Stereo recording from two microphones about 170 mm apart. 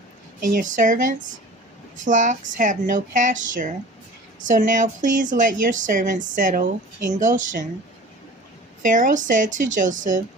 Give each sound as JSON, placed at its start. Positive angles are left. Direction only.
{"t": 0.4, "sound": "speech", "side_deg": -50}
{"t": 8.8, "sound": "speech", "side_deg": -50}